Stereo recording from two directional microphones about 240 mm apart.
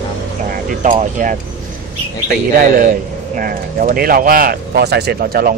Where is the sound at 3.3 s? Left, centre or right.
Right.